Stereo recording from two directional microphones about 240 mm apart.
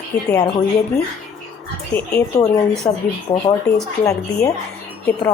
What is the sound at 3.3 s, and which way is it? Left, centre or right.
Speech, centre.